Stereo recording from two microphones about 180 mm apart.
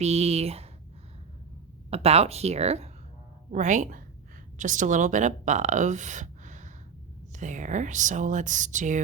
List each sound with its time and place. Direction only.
0.0 s speech: 35° right (ahead or behind)
1.9 s speech: 35° right (ahead or behind)